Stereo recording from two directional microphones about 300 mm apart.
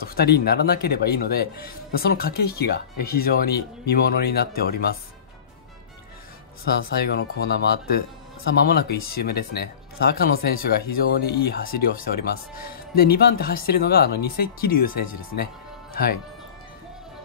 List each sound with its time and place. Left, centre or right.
0.0 s speech: left
7.0 s speech: left